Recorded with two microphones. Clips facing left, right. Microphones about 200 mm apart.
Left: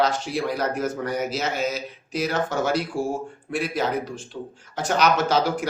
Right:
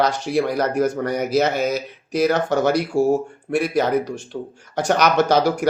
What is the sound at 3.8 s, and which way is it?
Speech, 65° right (ahead or behind).